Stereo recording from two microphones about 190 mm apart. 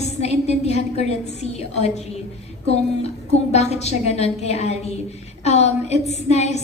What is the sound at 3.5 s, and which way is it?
A woman's voice, 35° left (ahead or behind).